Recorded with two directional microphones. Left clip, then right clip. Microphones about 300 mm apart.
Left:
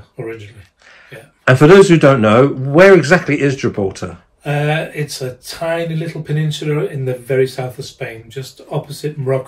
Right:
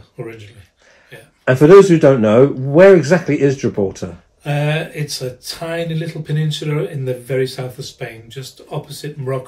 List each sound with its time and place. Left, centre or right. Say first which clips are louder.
1.4 s speech: even; left
4.4 s speech: left 2 dB; centre